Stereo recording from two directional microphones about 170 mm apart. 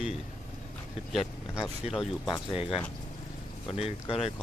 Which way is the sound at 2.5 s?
30° left (ahead or behind).